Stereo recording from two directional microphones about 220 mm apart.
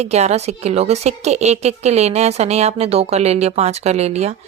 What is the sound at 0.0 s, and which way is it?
A woman's voice, 30° right (ahead or behind).